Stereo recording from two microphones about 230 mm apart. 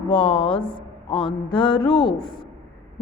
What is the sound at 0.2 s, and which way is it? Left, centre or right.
A woman's voice, left.